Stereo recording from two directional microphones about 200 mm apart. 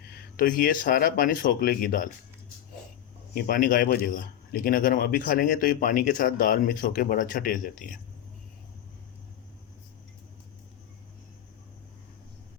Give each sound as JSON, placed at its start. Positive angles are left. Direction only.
{"t": 0.1, "sound": "a man's voice", "side_deg": 45}
{"t": 3.3, "sound": "a man's voice", "side_deg": 50}